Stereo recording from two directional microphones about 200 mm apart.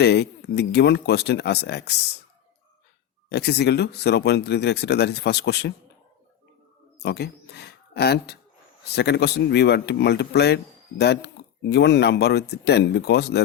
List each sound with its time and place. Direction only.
0.0 s speech: 55° left (ahead or behind)
3.2 s speech: 55° left (ahead or behind)
7.0 s speech: 55° left (ahead or behind)